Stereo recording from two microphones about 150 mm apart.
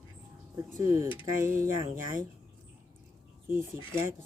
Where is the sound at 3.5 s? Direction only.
15° right (ahead or behind).